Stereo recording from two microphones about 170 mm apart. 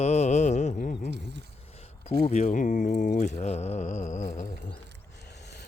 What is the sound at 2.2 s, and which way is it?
Mantra, 40° left (ahead or behind).